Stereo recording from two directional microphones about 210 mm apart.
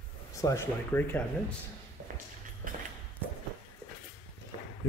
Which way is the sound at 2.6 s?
40° right (ahead or behind).